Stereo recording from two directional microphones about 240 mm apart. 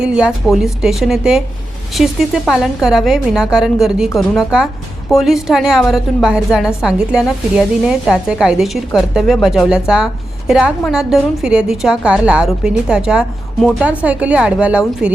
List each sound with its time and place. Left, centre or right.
0.0 s a woman's voice: centre